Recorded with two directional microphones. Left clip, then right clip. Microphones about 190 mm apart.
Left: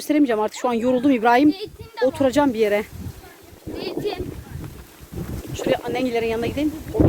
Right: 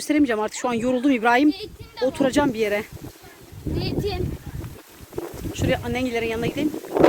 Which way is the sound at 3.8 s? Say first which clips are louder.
Left 2 dB; 65° right (ahead or behind).